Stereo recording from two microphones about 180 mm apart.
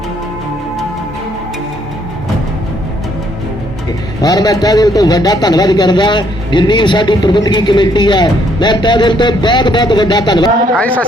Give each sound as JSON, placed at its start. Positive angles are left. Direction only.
{"t": 4.2, "sound": "a man's voice", "side_deg": 20}